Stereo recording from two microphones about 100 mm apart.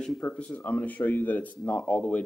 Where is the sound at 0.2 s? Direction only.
10° left (ahead or behind).